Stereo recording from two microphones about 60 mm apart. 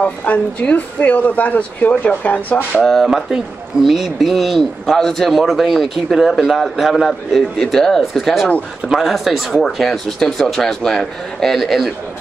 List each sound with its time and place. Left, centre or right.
0.0 s speech: left
2.8 s a man's voice: centre